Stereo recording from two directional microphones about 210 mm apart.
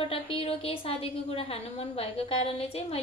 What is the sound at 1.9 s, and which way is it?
Speech, 30° left (ahead or behind).